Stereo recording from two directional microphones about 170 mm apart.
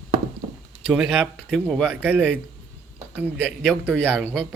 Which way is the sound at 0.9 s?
Centre (ahead or behind).